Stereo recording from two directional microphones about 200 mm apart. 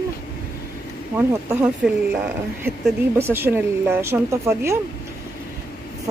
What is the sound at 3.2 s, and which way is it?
Speech, 10° right (ahead or behind).